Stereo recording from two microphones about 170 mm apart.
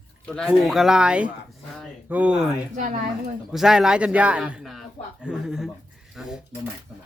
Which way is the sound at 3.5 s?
5° right (ahead or behind).